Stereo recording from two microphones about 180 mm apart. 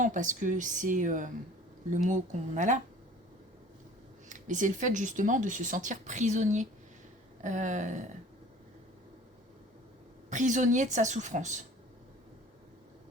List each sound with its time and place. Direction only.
0.0 s speech: 45° right (ahead or behind)
2.6 s speech: 45° right (ahead or behind)
4.3 s speech: 45° right (ahead or behind)
10.2 s speech: 45° right (ahead or behind)